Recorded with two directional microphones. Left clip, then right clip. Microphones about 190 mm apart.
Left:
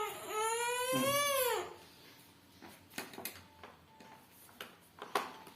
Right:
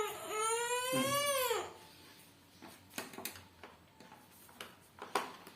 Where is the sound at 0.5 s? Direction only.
25° left (ahead or behind).